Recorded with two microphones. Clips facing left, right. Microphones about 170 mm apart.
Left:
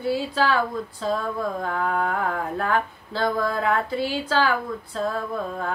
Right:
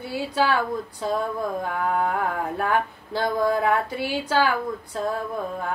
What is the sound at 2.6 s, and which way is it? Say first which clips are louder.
Speech: right 2 dB; 15° right (ahead or behind).